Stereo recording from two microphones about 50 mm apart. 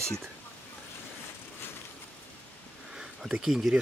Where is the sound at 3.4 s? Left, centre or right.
Centre.